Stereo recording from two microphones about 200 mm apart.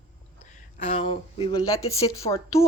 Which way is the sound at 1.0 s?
25° left (ahead or behind).